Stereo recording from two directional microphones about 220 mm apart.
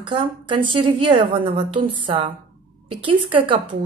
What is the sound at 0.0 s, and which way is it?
Speech, 20° right (ahead or behind).